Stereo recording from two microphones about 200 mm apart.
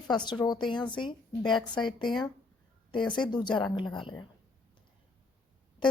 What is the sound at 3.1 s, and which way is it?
Speech, 25° left (ahead or behind).